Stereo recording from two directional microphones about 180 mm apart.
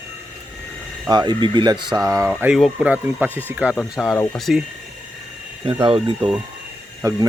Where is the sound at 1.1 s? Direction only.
25° right (ahead or behind).